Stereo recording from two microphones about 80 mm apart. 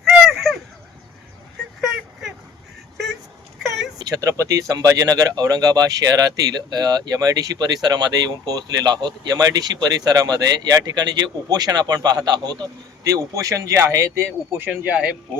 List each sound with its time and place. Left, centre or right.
0.0 s a sound: centre
4.0 s speech: right
13.1 s speech: right
14.7 s speech: right